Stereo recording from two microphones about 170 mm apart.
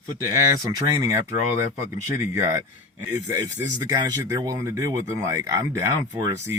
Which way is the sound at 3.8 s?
20° right (ahead or behind).